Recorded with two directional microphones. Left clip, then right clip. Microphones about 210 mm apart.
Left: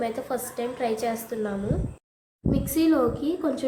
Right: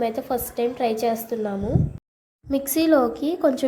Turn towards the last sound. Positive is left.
turn(degrees=-30)  # may be behind; listen again after turning